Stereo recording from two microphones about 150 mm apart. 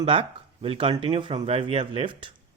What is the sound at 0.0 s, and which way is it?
Speech, 35° right (ahead or behind).